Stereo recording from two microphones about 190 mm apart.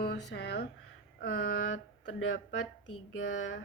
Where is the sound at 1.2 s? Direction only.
55° left (ahead or behind).